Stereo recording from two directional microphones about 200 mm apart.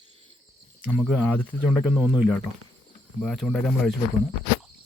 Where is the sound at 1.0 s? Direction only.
Centre (ahead or behind).